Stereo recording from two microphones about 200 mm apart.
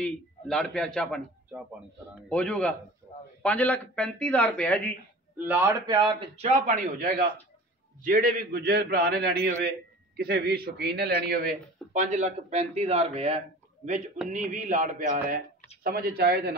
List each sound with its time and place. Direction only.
0.0 s a man's voice: 5° left (ahead or behind)
2.2 s a man's voice: 5° left (ahead or behind)
5.4 s a man's voice: 10° right (ahead or behind); by 16.5 s 50° right (ahead or behind)